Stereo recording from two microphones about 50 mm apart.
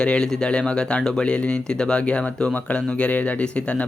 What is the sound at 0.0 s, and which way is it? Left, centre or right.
Speech, centre.